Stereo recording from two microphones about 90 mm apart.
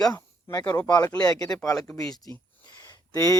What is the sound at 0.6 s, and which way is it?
Speech, 55° left (ahead or behind).